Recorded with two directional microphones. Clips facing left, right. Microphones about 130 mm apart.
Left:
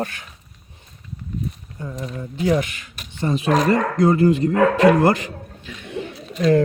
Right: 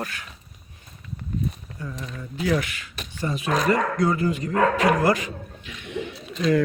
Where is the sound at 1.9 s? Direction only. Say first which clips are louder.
Left 7 dB; 25° left (ahead or behind).